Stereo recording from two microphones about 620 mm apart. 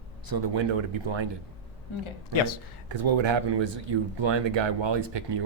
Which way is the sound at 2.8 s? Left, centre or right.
Right.